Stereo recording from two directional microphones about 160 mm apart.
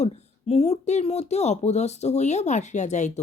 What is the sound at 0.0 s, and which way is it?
Speech, 40° left (ahead or behind).